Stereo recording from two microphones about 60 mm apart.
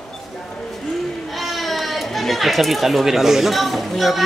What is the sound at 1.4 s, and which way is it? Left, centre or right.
Speech, centre.